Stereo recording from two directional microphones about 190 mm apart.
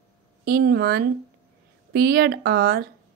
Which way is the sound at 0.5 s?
55° right (ahead or behind).